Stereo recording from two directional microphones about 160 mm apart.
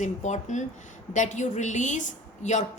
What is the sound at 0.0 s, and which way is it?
A woman's voice, 50° left (ahead or behind).